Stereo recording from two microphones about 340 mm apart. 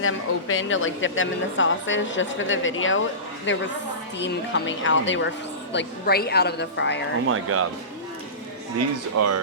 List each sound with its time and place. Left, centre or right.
0.0 s a woman's voice: left
7.3 s speech: right
9.1 s speech: right